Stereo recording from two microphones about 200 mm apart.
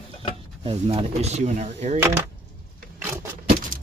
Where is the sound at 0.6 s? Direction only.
30° right (ahead or behind).